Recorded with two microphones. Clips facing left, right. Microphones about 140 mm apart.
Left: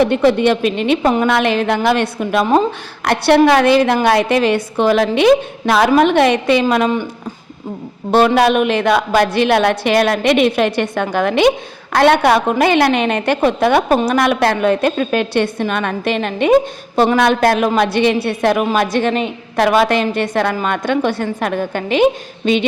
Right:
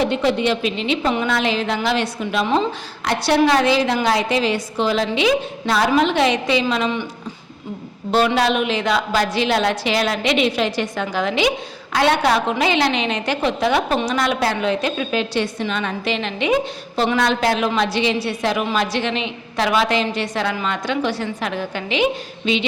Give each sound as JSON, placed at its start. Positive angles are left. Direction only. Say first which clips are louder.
{"t": 0.0, "sound": "a woman's voice", "louder": "left 6 dB", "side_deg": 55}
{"t": 8.1, "sound": "a woman's voice", "louder": "left 6 dB", "side_deg": 50}